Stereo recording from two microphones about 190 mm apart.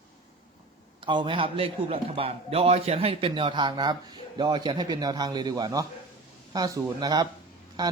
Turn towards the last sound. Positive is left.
turn(degrees=-20)  # may be behind; listen again after turning